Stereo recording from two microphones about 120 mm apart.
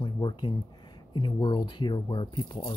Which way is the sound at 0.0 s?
40° left (ahead or behind).